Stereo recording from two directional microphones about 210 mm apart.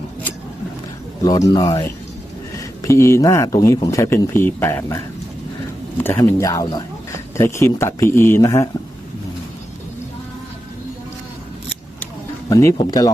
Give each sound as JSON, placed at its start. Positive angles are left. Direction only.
{"t": 1.2, "sound": "speech", "side_deg": 15}
{"t": 12.5, "sound": "speech", "side_deg": 15}